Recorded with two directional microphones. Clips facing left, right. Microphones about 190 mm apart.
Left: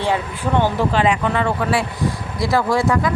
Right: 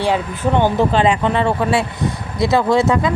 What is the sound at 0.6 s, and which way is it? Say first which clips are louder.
Speech: right 3 dB; 25° right (ahead or behind).